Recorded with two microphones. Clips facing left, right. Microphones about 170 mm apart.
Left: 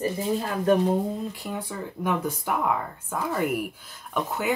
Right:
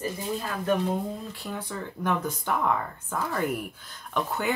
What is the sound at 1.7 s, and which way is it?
Speech, 10° left (ahead or behind).